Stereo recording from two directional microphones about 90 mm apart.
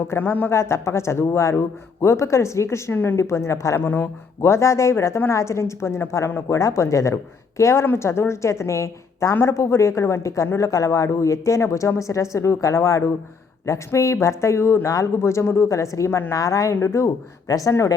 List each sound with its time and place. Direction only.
0.1 s speech: 25° left (ahead or behind)